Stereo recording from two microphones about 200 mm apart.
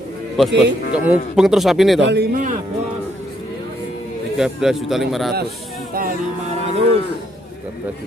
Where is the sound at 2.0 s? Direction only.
60° right (ahead or behind).